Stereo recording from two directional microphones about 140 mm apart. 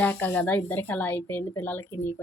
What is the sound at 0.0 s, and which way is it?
Speech, 15° left (ahead or behind).